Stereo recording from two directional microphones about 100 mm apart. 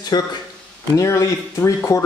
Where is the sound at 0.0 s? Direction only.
45° left (ahead or behind).